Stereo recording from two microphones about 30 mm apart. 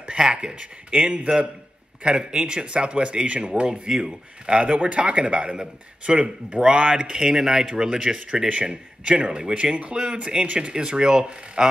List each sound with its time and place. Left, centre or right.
0.1 s a man's voice: right
2.0 s a man's voice: right
3.6 s speech: right
4.6 s speech: right
5.1 s a man's voice: right
7.0 s speech: right
8.5 s a man's voice: right
9.9 s speech: right
10.4 s speech: right
10.7 s speech: right